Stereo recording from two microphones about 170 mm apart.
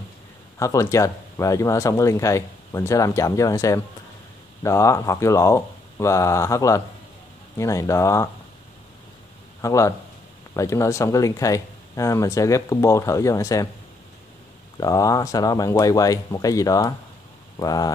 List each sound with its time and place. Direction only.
0.6 s speech: 20° left (ahead or behind)
9.6 s speech: 20° left (ahead or behind)
14.8 s speech: 20° left (ahead or behind)